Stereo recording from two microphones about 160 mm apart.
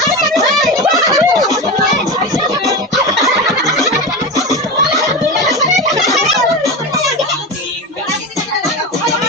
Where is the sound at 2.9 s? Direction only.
Centre (ahead or behind).